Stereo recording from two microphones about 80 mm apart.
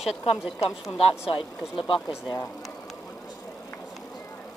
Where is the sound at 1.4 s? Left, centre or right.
Left.